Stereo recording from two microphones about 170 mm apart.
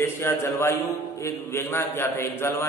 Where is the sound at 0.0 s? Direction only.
15° left (ahead or behind).